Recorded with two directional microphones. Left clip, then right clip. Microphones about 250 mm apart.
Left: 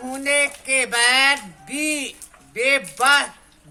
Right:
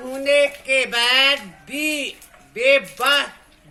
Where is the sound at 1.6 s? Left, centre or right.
Left.